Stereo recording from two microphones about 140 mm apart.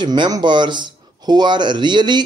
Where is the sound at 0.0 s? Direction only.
30° right (ahead or behind).